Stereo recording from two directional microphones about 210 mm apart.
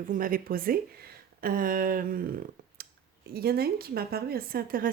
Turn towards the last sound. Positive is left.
turn(degrees=-40)  # may be behind; listen again after turning